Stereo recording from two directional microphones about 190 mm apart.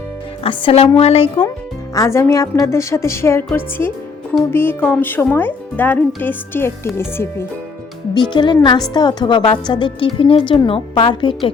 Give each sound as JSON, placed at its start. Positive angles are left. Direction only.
{"t": 0.4, "sound": "a woman's voice", "side_deg": 30}
{"t": 1.9, "sound": "speech", "side_deg": 15}
{"t": 8.1, "sound": "speech", "side_deg": 25}